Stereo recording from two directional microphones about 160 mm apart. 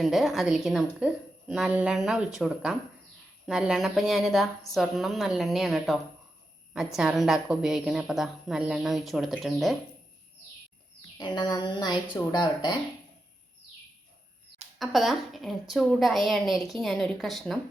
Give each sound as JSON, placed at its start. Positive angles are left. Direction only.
{"t": 0.0, "sound": "a woman's voice", "side_deg": 0}
{"t": 11.2, "sound": "speech", "side_deg": 25}
{"t": 14.8, "sound": "a woman's voice", "side_deg": 0}